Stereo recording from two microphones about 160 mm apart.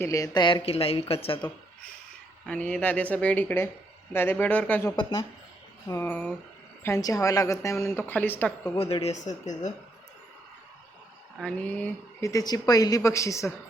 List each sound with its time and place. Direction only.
0.0 s speech: 20° left (ahead or behind); by 1.5 s 35° left (ahead or behind)
2.5 s a woman's voice: 5° left (ahead or behind)
6.8 s a woman's voice: 20° left (ahead or behind)
8.7 s speech: 35° left (ahead or behind)
11.3 s a woman's voice: 5° left (ahead or behind)
12.2 s a woman's voice: 20° left (ahead or behind)